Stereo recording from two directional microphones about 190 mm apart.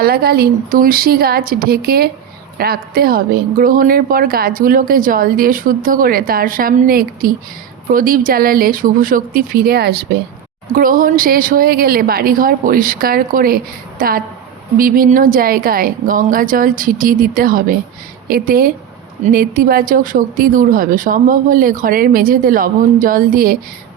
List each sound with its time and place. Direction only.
0.0 s speech: 55° right (ahead or behind)